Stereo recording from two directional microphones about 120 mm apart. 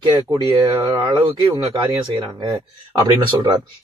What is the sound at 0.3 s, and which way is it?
Speech, 35° right (ahead or behind).